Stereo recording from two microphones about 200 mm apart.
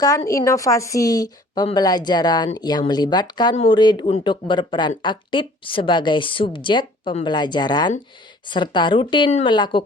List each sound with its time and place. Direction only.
0.0 s speech: 15° left (ahead or behind)